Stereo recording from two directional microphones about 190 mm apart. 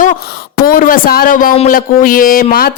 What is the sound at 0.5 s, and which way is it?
Speech, 50° left (ahead or behind).